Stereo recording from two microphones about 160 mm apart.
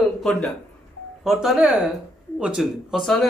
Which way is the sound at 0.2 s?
Centre (ahead or behind).